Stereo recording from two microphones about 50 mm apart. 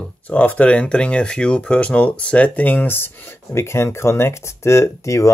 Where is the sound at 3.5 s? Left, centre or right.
Left.